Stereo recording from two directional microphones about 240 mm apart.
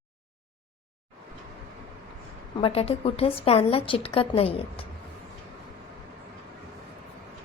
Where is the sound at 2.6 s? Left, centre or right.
Left.